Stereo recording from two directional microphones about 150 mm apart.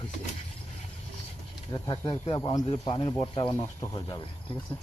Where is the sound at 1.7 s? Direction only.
25° left (ahead or behind).